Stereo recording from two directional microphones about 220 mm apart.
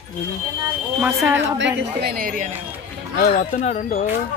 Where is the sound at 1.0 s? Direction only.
10° right (ahead or behind).